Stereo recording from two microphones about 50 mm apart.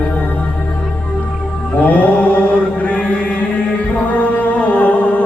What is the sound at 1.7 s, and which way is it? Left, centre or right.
Mantra, left.